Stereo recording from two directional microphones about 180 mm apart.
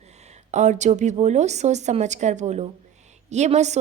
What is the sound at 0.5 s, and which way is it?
A woman's voice, 40° right (ahead or behind).